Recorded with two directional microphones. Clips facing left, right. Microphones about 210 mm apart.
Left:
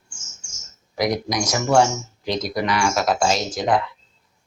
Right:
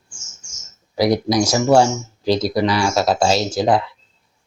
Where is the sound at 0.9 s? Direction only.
30° right (ahead or behind).